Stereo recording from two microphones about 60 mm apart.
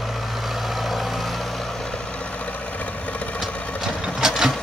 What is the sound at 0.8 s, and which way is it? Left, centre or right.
Vehicle, centre.